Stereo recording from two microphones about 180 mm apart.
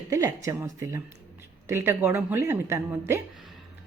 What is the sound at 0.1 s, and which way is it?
Speech, 20° right (ahead or behind).